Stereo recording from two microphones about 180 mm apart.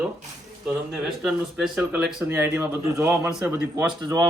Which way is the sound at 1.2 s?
Centre (ahead or behind).